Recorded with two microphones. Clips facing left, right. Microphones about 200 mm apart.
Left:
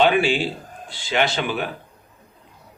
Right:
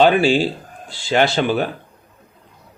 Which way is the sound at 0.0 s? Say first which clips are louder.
Right 4 dB; 40° right (ahead or behind).